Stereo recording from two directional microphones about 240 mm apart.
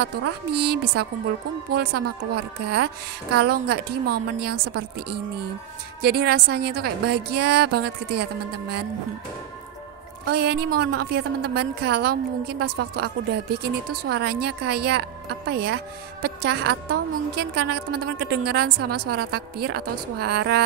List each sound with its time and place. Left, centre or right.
0.6 s a woman's voice: right
10.2 s a woman's voice: right